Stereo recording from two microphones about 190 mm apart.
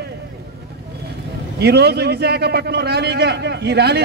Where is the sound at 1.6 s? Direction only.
60° right (ahead or behind).